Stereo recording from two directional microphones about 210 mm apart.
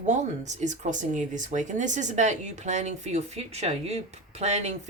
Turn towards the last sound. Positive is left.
turn(degrees=-35)  # may be behind; listen again after turning